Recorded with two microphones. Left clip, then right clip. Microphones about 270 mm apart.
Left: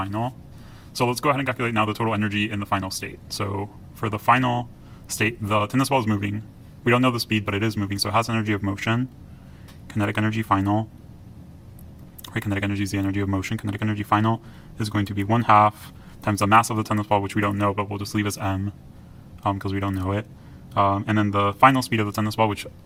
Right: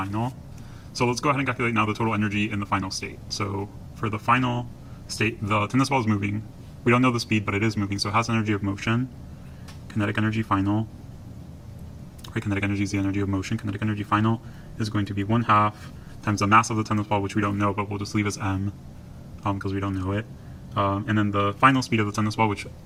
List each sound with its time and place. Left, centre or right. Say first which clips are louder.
0.0 s a sound: left 2 dB; left
0.9 s speech: left 2 dB; left
10.0 s speech: left 2 dB; left
12.3 s speech: left 1 dB; left